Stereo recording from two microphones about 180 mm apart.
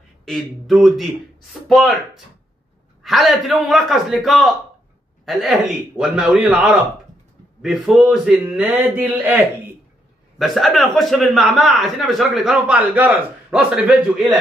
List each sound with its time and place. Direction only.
0.2 s a man's voice: centre (ahead or behind)
10.4 s a man's voice: centre (ahead or behind)